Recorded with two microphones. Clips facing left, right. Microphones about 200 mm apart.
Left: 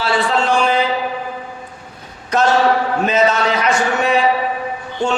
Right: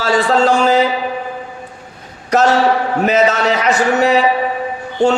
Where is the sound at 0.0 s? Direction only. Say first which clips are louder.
Right 4 dB; 40° right (ahead or behind).